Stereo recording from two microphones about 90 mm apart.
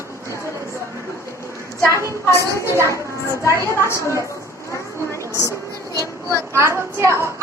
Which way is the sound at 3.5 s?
35° left (ahead or behind).